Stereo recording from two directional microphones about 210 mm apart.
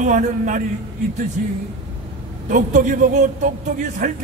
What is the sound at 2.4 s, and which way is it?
A man's voice, 40° right (ahead or behind).